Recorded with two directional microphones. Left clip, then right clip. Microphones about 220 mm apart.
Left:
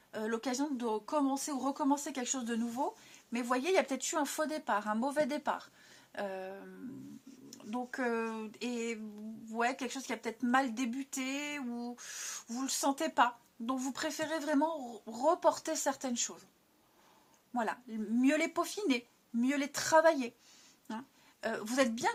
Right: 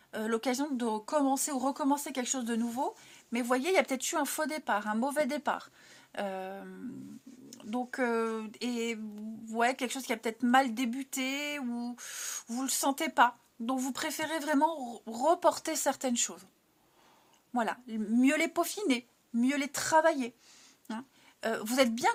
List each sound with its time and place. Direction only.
0.1 s speech: 35° right (ahead or behind)
17.5 s speech: 35° right (ahead or behind)
21.4 s speech: 35° right (ahead or behind)